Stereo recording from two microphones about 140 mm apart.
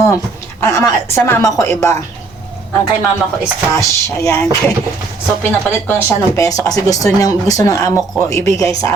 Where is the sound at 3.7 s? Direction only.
20° left (ahead or behind).